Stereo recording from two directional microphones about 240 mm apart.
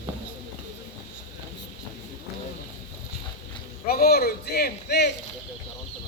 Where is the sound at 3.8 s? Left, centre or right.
Left.